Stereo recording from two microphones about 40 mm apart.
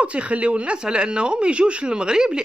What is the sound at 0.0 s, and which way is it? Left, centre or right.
Speech, right.